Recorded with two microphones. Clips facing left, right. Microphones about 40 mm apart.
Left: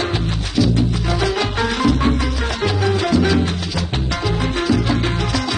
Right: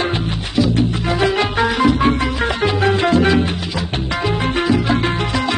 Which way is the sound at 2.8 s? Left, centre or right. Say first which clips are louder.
Right 3 dB; right.